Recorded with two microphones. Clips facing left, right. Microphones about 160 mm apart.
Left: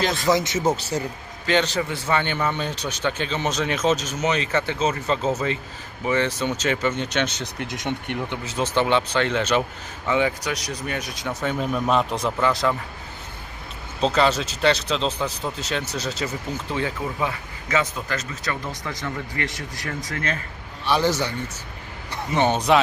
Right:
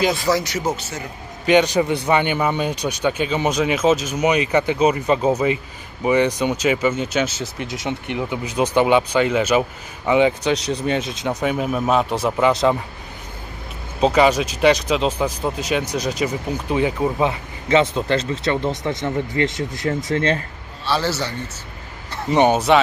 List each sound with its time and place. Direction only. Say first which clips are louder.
0.3 s speech: even; 20° left (ahead or behind)
0.8 s a man's voice: left 5 dB; 35° left (ahead or behind)
1.5 s a man's voice: right 6 dB; 15° right (ahead or behind)
8.3 s a man's voice: right 7 dB; 15° right (ahead or behind)
10.1 s speech: right 6 dB; 20° right (ahead or behind)
11.6 s a man's voice: right 1 dB; 5° right (ahead or behind)
12.4 s speech: right 6 dB; 20° right (ahead or behind)
14.0 s a man's voice: right 5 dB; 10° right (ahead or behind); by 20.4 s 25° right (ahead or behind)
20.8 s a man's voice: left 1 dB; 15° left (ahead or behind)
22.3 s a man's voice: right 6 dB; 15° right (ahead or behind)